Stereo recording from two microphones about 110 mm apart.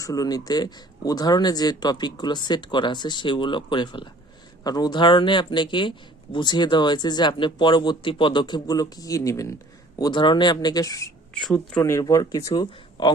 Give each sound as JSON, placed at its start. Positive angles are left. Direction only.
{"t": 0.0, "sound": "speech", "side_deg": 35}
{"t": 4.6, "sound": "speech", "side_deg": 35}
{"t": 10.0, "sound": "speech", "side_deg": 45}
{"t": 11.3, "sound": "speech", "side_deg": 5}
{"t": 11.8, "sound": "speech", "side_deg": 30}